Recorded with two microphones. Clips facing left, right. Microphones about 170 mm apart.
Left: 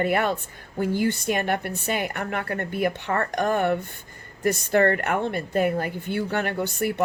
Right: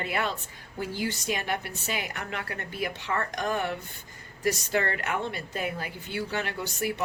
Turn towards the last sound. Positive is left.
turn(degrees=55)  # may be behind; listen again after turning